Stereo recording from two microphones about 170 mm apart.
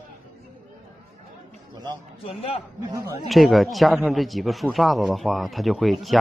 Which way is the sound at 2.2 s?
35° left (ahead or behind).